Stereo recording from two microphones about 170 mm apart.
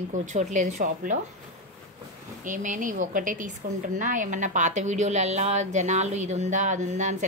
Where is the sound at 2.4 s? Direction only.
50° right (ahead or behind).